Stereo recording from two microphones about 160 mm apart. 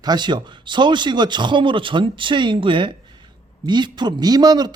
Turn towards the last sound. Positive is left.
turn(degrees=-25)  # may be behind; listen again after turning